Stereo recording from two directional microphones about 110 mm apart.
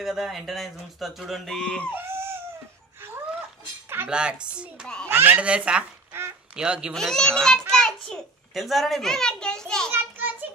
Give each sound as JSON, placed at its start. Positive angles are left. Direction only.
{"t": 0.0, "sound": "speech", "side_deg": -5}
{"t": 2.0, "sound": "crying", "side_deg": -20}
{"t": 4.1, "sound": "speech", "side_deg": -10}
{"t": 5.0, "sound": "speech", "side_deg": -20}
{"t": 6.9, "sound": "speech", "side_deg": 5}
{"t": 7.7, "sound": "a sound", "side_deg": 5}
{"t": 9.8, "sound": "a sound", "side_deg": -20}